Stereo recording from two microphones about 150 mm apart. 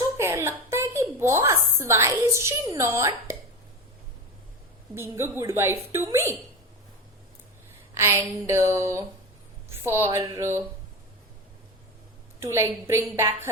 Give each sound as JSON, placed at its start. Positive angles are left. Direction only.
{"t": 0.2, "sound": "a sound", "side_deg": -20}
{"t": 4.9, "sound": "a woman's voice", "side_deg": -15}
{"t": 7.9, "sound": "a woman's voice", "side_deg": -20}
{"t": 12.4, "sound": "a woman's voice", "side_deg": -15}